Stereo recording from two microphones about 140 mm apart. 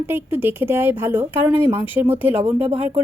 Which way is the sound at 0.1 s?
15° right (ahead or behind).